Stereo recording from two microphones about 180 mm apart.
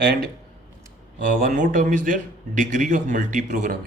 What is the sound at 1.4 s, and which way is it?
A man's voice, 45° right (ahead or behind).